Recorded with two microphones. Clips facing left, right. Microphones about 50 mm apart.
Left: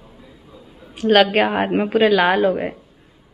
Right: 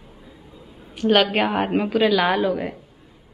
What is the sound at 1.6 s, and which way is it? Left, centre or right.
Speech, centre.